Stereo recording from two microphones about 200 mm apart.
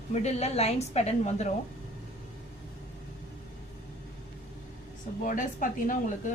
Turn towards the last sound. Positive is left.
turn(degrees=40)  # may be behind; listen again after turning